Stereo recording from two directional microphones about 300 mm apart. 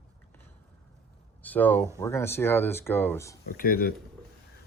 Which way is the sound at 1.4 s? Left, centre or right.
Centre.